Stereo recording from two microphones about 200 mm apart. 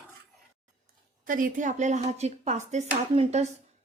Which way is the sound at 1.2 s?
45° right (ahead or behind).